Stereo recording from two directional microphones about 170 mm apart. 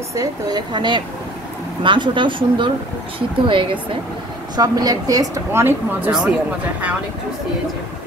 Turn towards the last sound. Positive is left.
turn(degrees=-5)  # may be behind; listen again after turning